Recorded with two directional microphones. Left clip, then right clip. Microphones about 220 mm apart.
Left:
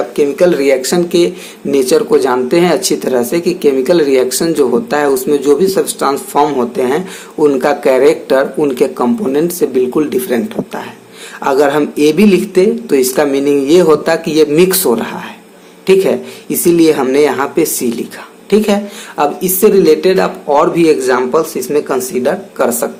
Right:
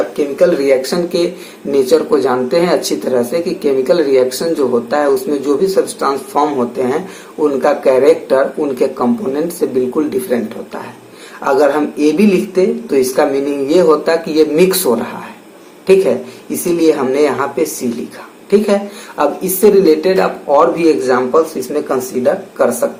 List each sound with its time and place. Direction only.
0.2 s speech: 45° left (ahead or behind)
11.4 s speech: 45° left (ahead or behind)
16.7 s speech: 45° left (ahead or behind)